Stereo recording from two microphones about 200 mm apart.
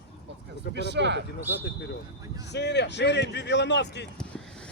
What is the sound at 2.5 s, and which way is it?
Speech, 60° left (ahead or behind).